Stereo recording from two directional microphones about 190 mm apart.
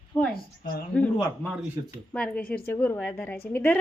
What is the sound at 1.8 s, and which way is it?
Speech, 20° right (ahead or behind).